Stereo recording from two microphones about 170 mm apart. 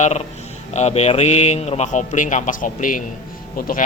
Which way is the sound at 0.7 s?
40° left (ahead or behind).